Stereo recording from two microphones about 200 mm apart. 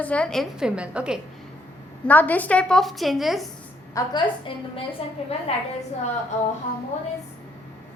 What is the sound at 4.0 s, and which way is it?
A woman's voice, 20° left (ahead or behind).